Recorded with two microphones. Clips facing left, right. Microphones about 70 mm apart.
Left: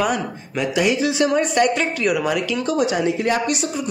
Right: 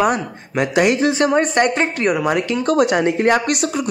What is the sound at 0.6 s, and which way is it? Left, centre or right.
Speech, right.